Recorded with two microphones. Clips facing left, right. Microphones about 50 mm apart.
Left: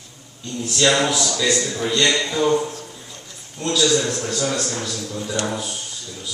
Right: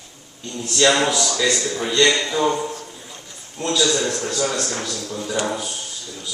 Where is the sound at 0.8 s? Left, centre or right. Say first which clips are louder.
Right 1 dB; centre.